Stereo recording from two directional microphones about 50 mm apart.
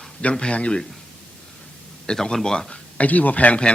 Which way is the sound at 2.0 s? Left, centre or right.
Centre.